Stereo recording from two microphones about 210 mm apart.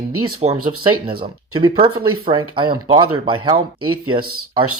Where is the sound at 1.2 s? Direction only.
20° right (ahead or behind).